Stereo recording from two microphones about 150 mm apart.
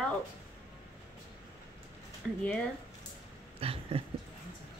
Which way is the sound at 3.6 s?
40° right (ahead or behind).